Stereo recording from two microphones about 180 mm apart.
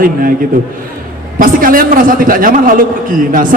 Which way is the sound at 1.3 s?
50° right (ahead or behind).